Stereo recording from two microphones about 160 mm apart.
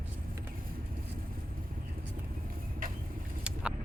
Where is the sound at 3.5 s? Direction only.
5° right (ahead or behind).